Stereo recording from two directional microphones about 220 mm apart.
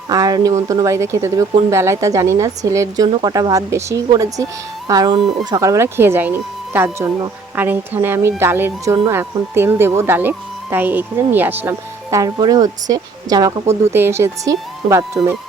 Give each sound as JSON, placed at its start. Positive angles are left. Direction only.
{"t": 0.1, "sound": "speech", "side_deg": -15}